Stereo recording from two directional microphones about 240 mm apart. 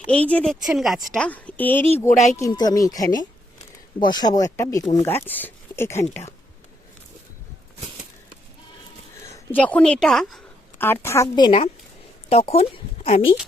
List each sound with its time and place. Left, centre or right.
0.0 s a woman's voice: centre
2.0 s speech: left
2.4 s speech: centre
9.3 s a woman's voice: centre; by 13.3 s left